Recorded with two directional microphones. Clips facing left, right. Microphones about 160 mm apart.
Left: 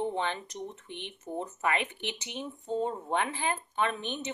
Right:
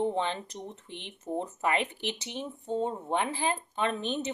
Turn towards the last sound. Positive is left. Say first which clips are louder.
# right 3 dB
turn(degrees=-35)  # may be behind; listen again after turning